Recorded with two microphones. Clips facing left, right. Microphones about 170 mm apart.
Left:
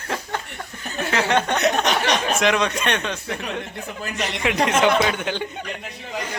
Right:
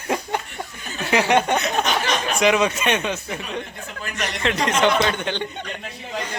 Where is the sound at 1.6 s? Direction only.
70° left (ahead or behind).